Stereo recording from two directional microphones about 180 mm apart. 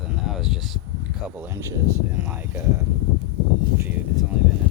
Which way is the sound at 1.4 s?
15° right (ahead or behind).